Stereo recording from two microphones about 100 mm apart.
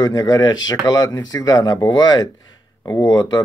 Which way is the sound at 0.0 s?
40° left (ahead or behind).